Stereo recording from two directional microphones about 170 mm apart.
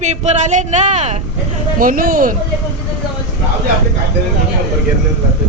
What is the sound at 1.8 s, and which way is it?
Speech, 55° right (ahead or behind).